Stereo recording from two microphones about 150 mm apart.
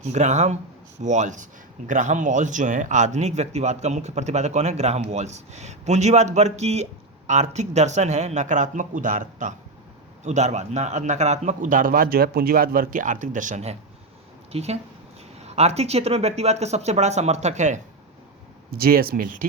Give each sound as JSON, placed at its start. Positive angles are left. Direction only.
{"t": 0.0, "sound": "speech", "side_deg": -50}
{"t": 18.7, "sound": "speech", "side_deg": -80}